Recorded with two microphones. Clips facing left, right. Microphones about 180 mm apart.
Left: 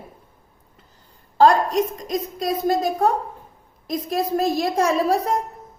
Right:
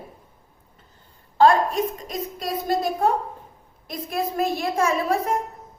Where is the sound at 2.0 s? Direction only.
40° left (ahead or behind).